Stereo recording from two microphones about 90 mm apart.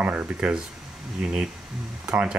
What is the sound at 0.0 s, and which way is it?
Speech, 15° right (ahead or behind).